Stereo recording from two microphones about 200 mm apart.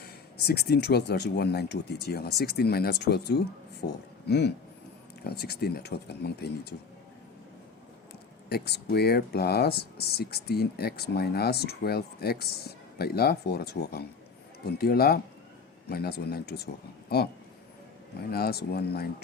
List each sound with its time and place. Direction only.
0.0 s speech: 50° left (ahead or behind)
8.4 s speech: 55° left (ahead or behind)
18.3 s speech: 50° left (ahead or behind)